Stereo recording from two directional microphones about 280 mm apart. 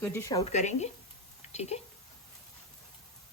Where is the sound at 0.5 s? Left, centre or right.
Left.